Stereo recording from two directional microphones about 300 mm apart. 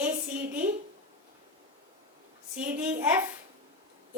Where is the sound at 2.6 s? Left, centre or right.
Centre.